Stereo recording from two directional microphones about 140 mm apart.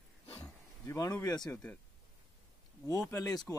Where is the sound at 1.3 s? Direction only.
25° left (ahead or behind).